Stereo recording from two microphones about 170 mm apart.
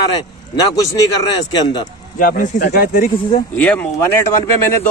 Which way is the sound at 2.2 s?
50° left (ahead or behind).